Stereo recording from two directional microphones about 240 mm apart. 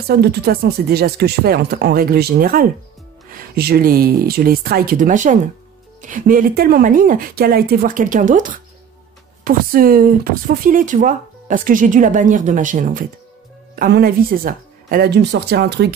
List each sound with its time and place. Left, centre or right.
0.1 s speech: right